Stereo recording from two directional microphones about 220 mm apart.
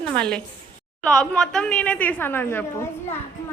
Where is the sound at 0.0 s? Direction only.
5° left (ahead or behind).